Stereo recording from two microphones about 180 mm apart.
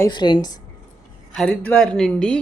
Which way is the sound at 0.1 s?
25° left (ahead or behind).